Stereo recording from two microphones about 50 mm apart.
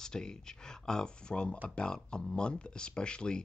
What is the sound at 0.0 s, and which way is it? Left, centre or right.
Speech, centre.